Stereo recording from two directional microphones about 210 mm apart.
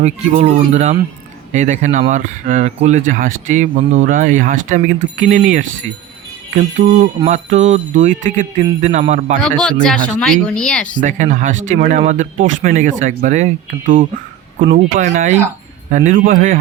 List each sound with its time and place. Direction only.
0.0 s speech: 35° right (ahead or behind)
9.4 s speech: 5° left (ahead or behind)
11.0 s speech: 35° right (ahead or behind)